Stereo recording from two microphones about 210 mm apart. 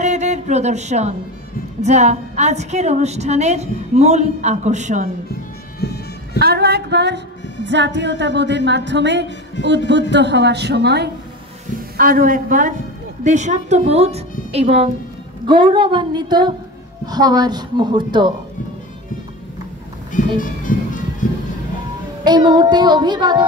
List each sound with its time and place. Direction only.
0.0 s a sound: 35° right (ahead or behind)
1.8 s a woman's voice: 30° right (ahead or behind)
5.8 s bagpipes: 50° left (ahead or behind)
6.4 s a woman's voice: 50° right (ahead or behind)
9.6 s speech: 55° left (ahead or behind)
10.1 s a woman's voice: 55° right (ahead or behind)
12.0 s a woman's voice: 40° right (ahead or behind); by 18.3 s 20° right (ahead or behind)
20.3 s music: 40° left (ahead or behind)
22.2 s a woman's voice: 20° right (ahead or behind)